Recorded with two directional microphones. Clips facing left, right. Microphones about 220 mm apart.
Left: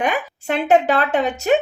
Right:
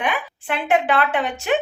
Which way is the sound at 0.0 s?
40° left (ahead or behind).